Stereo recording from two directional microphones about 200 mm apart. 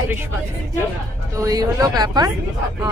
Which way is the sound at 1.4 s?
15° right (ahead or behind).